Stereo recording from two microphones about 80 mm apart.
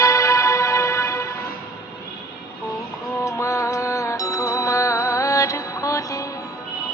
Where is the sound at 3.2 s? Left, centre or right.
Left.